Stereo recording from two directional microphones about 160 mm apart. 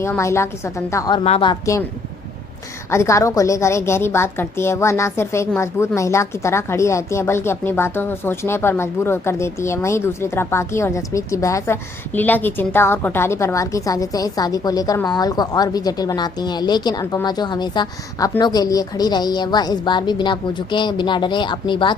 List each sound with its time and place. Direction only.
0.0 s a woman's voice: 15° left (ahead or behind)
1.2 s speech: 35° left (ahead or behind)
2.9 s a woman's voice: 20° left (ahead or behind)